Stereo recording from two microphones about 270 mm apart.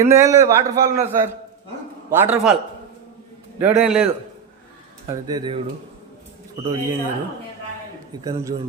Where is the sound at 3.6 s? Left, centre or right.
Centre.